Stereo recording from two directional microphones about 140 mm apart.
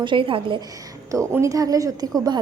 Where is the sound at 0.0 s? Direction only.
35° right (ahead or behind).